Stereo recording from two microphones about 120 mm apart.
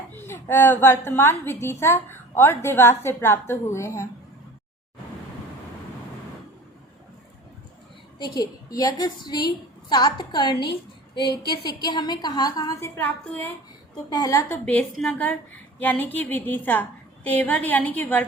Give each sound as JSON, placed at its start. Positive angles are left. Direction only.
{"t": 0.1, "sound": "a woman's voice", "side_deg": 20}
{"t": 8.2, "sound": "a woman's voice", "side_deg": 35}
{"t": 14.1, "sound": "a woman's voice", "side_deg": 30}
{"t": 14.6, "sound": "a woman's voice", "side_deg": 10}